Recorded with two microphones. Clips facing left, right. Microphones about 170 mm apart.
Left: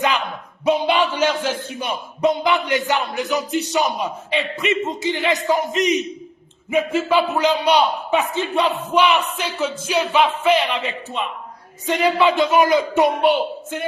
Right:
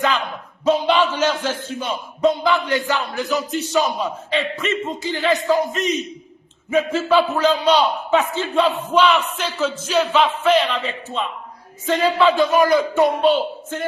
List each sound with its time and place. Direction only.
0.6 s a man's voice: 15° left (ahead or behind)